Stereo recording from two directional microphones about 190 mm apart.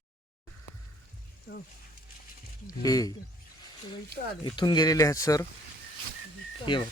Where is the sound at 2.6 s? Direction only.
20° left (ahead or behind).